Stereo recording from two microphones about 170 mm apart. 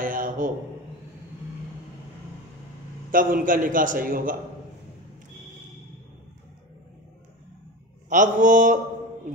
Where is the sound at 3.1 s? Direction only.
55° right (ahead or behind).